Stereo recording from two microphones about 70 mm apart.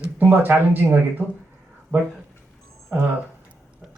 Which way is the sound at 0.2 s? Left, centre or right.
Right.